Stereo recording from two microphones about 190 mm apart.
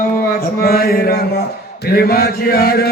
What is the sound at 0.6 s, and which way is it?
Mantra, 55° left (ahead or behind).